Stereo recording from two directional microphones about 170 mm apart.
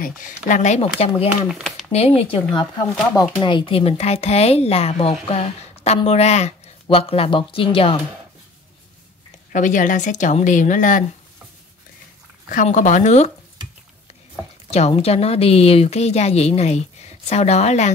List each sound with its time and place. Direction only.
0.5 s speech: 45° left (ahead or behind)
1.5 s speech: centre (ahead or behind)
1.9 s speech: 35° left (ahead or behind)
9.5 s speech: 45° left (ahead or behind)
12.4 s speech: 50° left (ahead or behind)
14.7 s speech: 35° left (ahead or behind)